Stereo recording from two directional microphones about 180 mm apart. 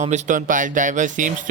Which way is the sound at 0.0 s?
40° right (ahead or behind).